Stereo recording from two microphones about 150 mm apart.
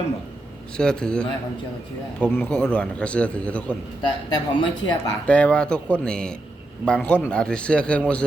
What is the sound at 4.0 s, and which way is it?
Speech, 30° left (ahead or behind).